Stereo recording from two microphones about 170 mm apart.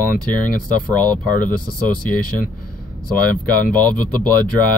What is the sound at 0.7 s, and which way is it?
Speech, 10° left (ahead or behind).